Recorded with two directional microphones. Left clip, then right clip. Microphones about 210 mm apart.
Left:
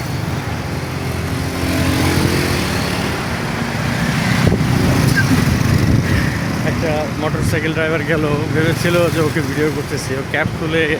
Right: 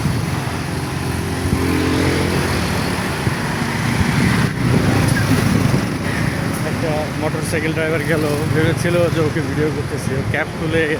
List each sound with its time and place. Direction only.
1.9 s vehicle: 50° left (ahead or behind)
7.5 s speech: 5° left (ahead or behind)
10.3 s speech: 10° left (ahead or behind)